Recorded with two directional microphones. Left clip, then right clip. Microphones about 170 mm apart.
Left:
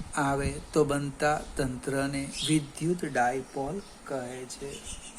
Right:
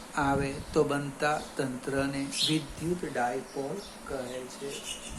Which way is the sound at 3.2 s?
70° left (ahead or behind).